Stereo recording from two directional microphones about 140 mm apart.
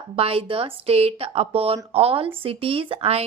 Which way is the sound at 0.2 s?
40° right (ahead or behind).